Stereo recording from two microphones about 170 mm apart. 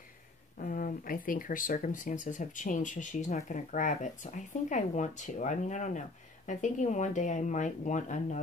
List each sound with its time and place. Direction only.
0.6 s speech: 55° left (ahead or behind)